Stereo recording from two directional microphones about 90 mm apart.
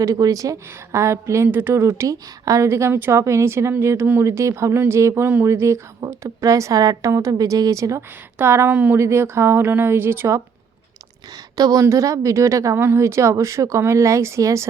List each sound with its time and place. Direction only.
0.0 s a woman's voice: 40° right (ahead or behind)
8.7 s speech: 15° right (ahead or behind)
9.0 s speech: 30° right (ahead or behind)
11.5 s a woman's voice: 45° right (ahead or behind)